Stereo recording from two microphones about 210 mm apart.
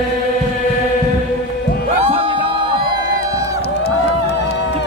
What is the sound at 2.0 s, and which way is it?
Music, 30° right (ahead or behind).